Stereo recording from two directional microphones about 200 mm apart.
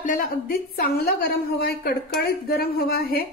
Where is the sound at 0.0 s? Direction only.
45° left (ahead or behind).